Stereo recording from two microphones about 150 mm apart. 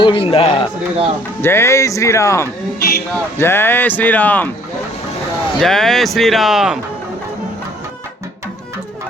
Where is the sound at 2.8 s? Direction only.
85° left.